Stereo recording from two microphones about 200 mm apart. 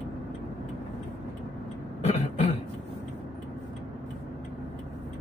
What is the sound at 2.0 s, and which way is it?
Throat clearing, 30° left (ahead or behind).